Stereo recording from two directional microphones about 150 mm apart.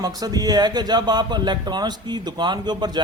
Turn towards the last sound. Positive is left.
turn(degrees=-30)  # may be behind; listen again after turning